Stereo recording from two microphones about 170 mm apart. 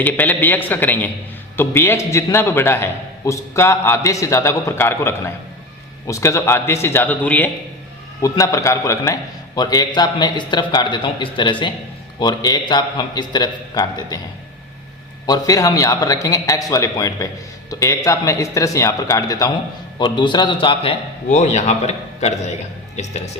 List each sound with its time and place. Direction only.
0.0 s a man's voice: 10° left (ahead or behind)
15.3 s a man's voice: 20° left (ahead or behind)
21.2 s a man's voice: 45° left (ahead or behind)